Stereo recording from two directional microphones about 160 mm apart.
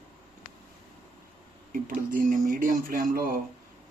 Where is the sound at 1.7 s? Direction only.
60° right (ahead or behind).